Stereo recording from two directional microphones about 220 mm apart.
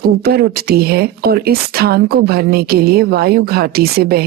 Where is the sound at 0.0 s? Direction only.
45° right (ahead or behind).